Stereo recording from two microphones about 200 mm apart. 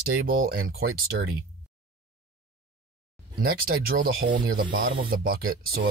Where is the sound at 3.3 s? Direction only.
50° right (ahead or behind).